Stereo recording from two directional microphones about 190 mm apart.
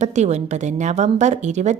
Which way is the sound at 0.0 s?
35° right (ahead or behind).